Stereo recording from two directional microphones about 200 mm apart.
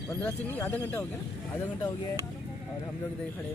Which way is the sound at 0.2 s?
10° left (ahead or behind).